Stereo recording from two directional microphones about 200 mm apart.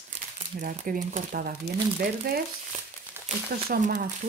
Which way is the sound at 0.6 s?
40° right (ahead or behind).